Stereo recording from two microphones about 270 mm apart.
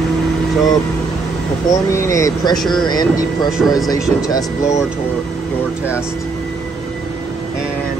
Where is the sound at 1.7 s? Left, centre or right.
Centre.